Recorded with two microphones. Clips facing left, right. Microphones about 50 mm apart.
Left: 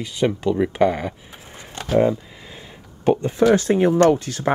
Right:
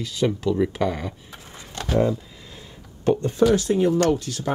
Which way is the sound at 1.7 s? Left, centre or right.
Centre.